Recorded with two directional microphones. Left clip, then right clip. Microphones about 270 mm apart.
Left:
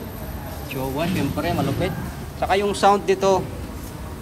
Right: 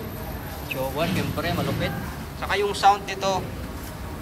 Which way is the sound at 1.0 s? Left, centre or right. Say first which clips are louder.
Left 4 dB; centre.